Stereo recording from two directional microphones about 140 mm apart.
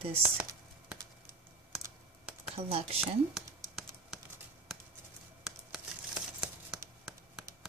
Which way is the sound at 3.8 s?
5° right (ahead or behind).